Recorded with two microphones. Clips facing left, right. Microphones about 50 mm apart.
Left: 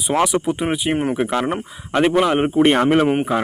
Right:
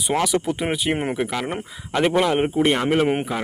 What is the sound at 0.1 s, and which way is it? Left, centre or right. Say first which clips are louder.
Speech: left 3 dB; centre.